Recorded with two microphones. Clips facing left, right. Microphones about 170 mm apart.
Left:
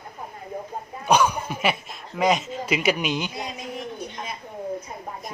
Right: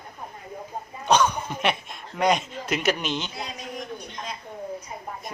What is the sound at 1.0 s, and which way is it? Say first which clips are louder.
Speech: left 1 dB; 10° left (ahead or behind).